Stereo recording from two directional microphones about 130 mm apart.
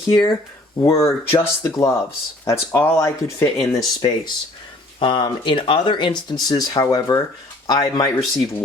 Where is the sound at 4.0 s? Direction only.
35° left (ahead or behind).